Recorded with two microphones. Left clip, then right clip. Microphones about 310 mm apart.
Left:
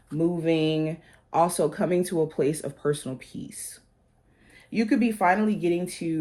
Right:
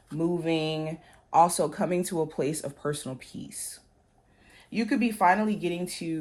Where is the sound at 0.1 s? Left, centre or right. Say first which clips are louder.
Left 3 dB; right.